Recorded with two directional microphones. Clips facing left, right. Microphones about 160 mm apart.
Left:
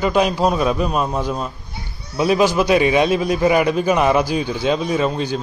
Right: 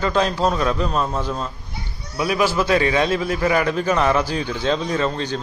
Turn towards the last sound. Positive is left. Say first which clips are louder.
# left 3 dB
turn(degrees=10)  # may be behind; listen again after turning